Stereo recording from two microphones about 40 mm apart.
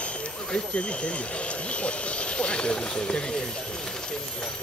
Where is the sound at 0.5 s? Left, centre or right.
Left.